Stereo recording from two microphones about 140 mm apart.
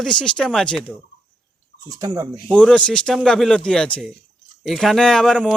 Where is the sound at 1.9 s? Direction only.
25° right (ahead or behind).